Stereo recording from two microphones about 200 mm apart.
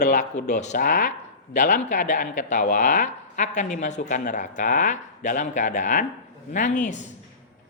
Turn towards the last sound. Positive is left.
turn(degrees=35)  # may be behind; listen again after turning